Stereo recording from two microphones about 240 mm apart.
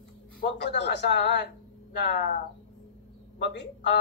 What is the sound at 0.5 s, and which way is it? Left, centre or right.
A woman's voice, left.